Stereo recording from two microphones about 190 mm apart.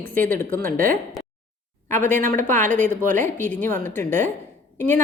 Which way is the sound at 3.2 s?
10° left (ahead or behind).